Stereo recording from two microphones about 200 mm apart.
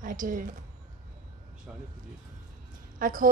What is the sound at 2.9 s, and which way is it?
Speech, 45° right (ahead or behind).